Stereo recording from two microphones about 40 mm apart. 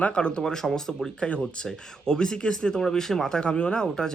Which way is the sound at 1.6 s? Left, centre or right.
Centre.